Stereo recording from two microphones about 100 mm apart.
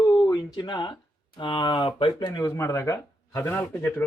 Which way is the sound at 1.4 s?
55° left (ahead or behind).